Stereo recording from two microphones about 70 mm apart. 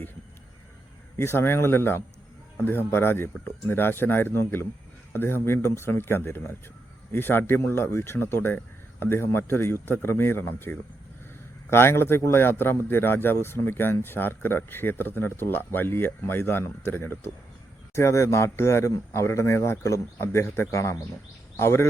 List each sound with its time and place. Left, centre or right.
1.1 s a man's voice: left
17.9 s a man's voice: left